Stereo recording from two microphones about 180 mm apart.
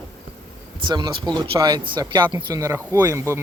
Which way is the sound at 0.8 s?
25° right (ahead or behind).